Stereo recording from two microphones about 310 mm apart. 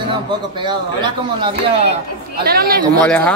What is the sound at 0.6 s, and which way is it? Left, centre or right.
Speech, centre.